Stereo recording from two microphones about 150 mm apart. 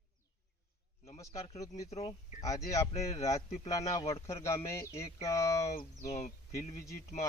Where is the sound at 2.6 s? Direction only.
20° left (ahead or behind).